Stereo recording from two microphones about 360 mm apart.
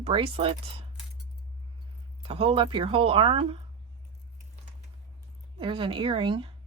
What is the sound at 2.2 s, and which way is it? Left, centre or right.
Speech, centre.